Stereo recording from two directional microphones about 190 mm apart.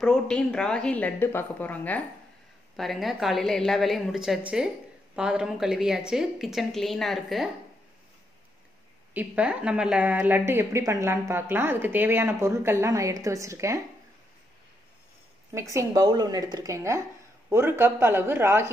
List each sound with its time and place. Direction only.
0.0 s a woman's voice: 5° left (ahead or behind)
9.1 s speech: 5° right (ahead or behind)
15.5 s speech: 15° right (ahead or behind)